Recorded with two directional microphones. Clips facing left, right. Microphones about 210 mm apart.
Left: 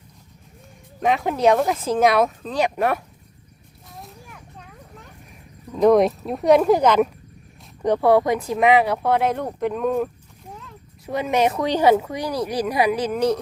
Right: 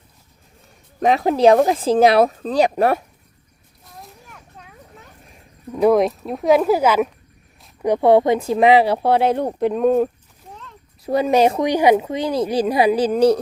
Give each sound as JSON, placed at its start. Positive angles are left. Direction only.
{"t": 1.0, "sound": "speech", "side_deg": -35}
{"t": 3.8, "sound": "a sound", "side_deg": 0}
{"t": 5.7, "sound": "speech", "side_deg": -5}
{"t": 8.0, "sound": "speech", "side_deg": -25}
{"t": 11.6, "sound": "speech", "side_deg": -15}